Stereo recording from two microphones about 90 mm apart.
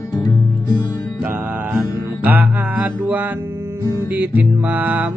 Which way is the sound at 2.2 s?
20° right (ahead or behind).